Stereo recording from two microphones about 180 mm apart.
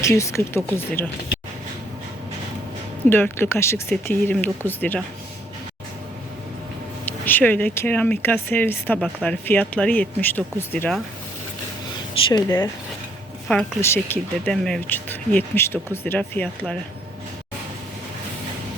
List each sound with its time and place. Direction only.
0.0 s speech: 15° left (ahead or behind)
3.1 s speech: 10° left (ahead or behind)
7.0 s speech: 10° left (ahead or behind)
12.3 s speech: 20° left (ahead or behind)